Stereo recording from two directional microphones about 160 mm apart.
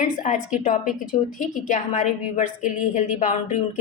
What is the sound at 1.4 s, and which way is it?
A woman's voice, 55° left (ahead or behind).